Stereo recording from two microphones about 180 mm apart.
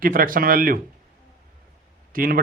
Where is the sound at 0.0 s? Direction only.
50° right (ahead or behind).